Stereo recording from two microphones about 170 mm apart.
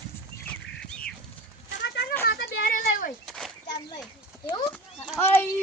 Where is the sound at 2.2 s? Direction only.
65° left (ahead or behind).